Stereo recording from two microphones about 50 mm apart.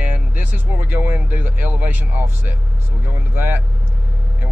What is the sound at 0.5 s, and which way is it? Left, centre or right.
Speech, right.